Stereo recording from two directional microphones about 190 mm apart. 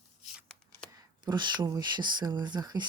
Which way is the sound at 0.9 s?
20° right (ahead or behind).